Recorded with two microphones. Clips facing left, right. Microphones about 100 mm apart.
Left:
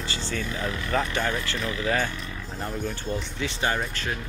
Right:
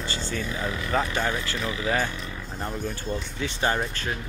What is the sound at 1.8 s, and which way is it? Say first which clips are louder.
Speech: even; 20° right (ahead or behind).